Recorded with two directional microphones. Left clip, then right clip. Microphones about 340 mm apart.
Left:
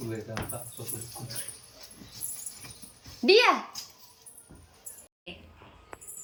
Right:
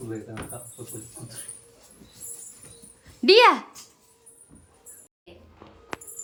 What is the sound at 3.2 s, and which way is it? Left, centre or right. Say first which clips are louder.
Speech: right 5 dB; centre.